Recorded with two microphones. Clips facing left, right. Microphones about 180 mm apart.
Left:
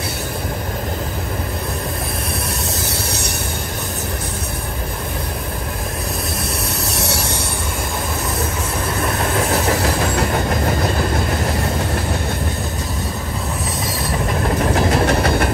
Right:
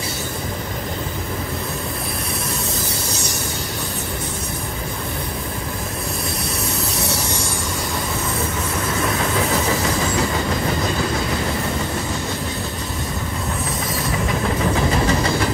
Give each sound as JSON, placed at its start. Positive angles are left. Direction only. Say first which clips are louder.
{"t": 2.9, "sound": "vehicle", "louder": "left 2 dB", "side_deg": 65}
{"t": 6.9, "sound": "a sound", "louder": "left 1 dB", "side_deg": 70}
{"t": 9.5, "sound": "train", "louder": "left 2 dB", "side_deg": 65}
{"t": 14.7, "sound": "vehicle", "louder": "left 3 dB", "side_deg": 70}